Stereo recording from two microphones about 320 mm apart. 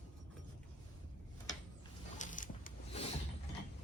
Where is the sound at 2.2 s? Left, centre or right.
Left.